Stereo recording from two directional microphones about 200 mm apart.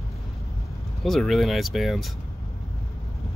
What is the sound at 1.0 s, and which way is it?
Speech, centre (ahead or behind).